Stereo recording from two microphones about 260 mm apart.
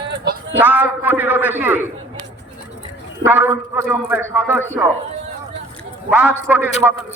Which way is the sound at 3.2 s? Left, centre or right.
Centre.